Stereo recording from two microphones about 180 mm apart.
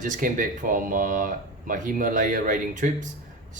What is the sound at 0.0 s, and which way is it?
Speech, 45° right (ahead or behind).